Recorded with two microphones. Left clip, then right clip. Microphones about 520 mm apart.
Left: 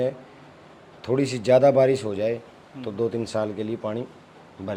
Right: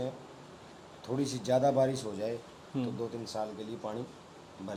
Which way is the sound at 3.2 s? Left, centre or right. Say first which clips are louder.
Left 10 dB; left.